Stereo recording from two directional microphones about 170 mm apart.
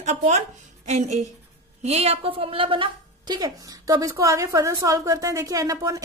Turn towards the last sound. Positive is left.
turn(degrees=-20)  # may be behind; listen again after turning